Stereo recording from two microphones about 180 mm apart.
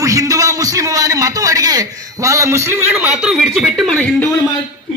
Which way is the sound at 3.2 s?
Centre (ahead or behind).